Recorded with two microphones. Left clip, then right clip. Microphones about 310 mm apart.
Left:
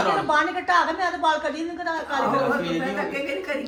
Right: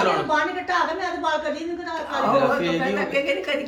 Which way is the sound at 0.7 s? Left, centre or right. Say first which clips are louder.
Left 2 dB; left.